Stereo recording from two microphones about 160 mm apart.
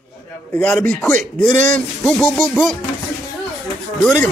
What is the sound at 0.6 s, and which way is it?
Speech, 5° left (ahead or behind).